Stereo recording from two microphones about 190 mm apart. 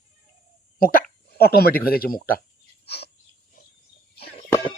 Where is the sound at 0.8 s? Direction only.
50° left (ahead or behind).